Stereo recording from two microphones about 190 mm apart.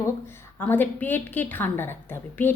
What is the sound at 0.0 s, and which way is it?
A woman's voice, 10° left (ahead or behind).